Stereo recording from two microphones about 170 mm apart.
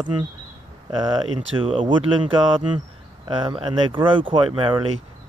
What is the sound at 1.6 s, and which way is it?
Speech, 30° right (ahead or behind).